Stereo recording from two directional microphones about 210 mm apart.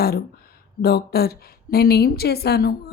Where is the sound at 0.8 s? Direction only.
50° left (ahead or behind).